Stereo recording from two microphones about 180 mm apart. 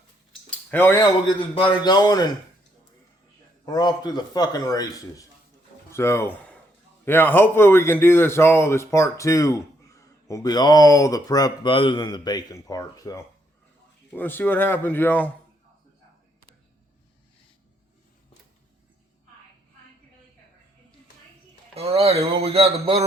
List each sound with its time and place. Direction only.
0.7 s a man's voice: 10° left (ahead or behind)
1.4 s a man's voice: 30° left (ahead or behind)
3.7 s a man's voice: 25° left (ahead or behind)
21.8 s speech: 35° right (ahead or behind)